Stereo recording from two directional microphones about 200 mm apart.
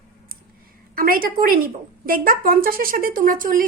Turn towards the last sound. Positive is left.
turn(degrees=-45)  # may be behind; listen again after turning